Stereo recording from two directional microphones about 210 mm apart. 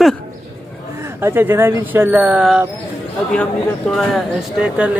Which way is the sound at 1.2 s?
10° right (ahead or behind).